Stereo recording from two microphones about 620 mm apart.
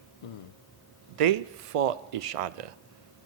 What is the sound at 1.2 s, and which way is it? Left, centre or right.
A man's voice, right.